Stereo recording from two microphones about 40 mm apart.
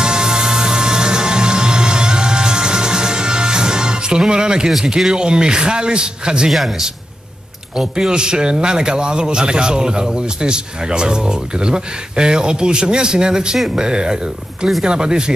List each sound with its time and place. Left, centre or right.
0.0 s music: centre
4.3 s a man's voice: right
4.6 s a man's voice: centre
7.7 s a man's voice: centre